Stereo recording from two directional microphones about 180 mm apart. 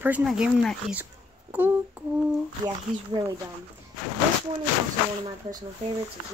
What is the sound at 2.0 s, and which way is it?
Humming, 5° right (ahead or behind).